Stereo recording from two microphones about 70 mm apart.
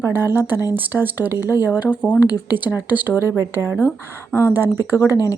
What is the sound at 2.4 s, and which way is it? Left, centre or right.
Speech, right.